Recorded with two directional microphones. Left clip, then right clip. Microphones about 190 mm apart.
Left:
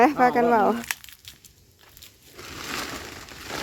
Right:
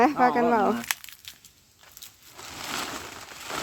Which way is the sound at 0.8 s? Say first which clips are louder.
Even; centre (ahead or behind).